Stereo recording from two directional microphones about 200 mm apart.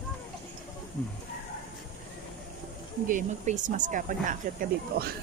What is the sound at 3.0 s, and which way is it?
Speech, 40° right (ahead or behind).